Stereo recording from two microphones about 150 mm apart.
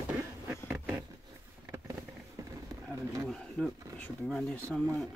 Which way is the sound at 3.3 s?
5° left (ahead or behind).